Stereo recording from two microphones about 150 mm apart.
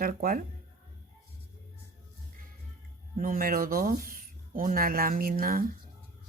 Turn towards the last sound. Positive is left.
turn(degrees=-70)  # may be behind; listen again after turning